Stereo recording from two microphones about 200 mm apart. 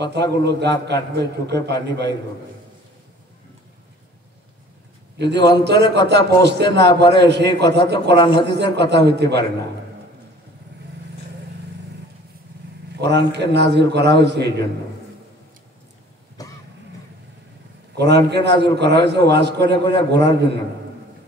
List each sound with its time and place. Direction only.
0.4 s a man's voice: 60° right (ahead or behind)
5.2 s a man's voice: 60° right (ahead or behind)
8.1 s a man's voice: 25° left (ahead or behind)
8.5 s a man's voice: 60° right (ahead or behind)
12.9 s a man's voice: 55° right (ahead or behind)
16.4 s cough: 20° left (ahead or behind)
17.9 s a man's voice: 55° right (ahead or behind)